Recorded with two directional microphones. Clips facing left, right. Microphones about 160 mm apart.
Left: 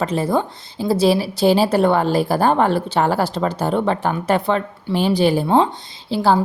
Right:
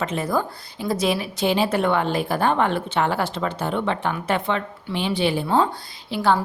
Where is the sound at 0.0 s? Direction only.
35° left (ahead or behind).